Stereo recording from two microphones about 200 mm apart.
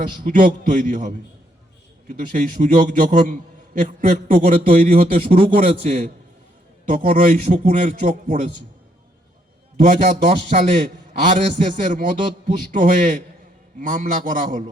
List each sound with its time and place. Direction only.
0.3 s a man's voice: 45° right (ahead or behind)
5.4 s a man's voice: 30° right (ahead or behind)
9.8 s a man's voice: 35° right (ahead or behind)